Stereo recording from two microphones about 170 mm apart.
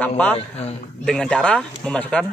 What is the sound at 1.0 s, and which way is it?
Speech, 5° left (ahead or behind).